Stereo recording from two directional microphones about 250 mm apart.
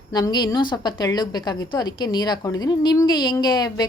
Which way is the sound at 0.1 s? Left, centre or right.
Centre.